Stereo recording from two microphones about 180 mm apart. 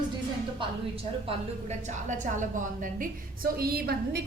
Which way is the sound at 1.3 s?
40° right (ahead or behind).